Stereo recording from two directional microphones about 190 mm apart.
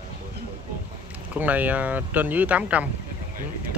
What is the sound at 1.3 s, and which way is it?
Speech, 10° right (ahead or behind).